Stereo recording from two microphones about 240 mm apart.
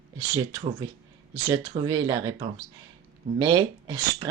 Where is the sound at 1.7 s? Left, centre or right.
Centre.